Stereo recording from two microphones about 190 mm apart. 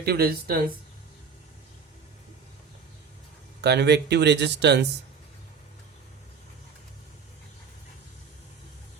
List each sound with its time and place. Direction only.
0.0 s speech: 55° right (ahead or behind)
3.6 s speech: 60° right (ahead or behind)